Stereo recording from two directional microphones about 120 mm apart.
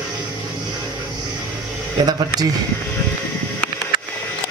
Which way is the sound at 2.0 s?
35° right (ahead or behind).